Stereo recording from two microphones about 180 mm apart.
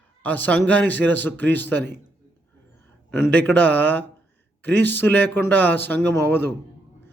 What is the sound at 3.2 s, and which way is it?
Speech, 10° left (ahead or behind).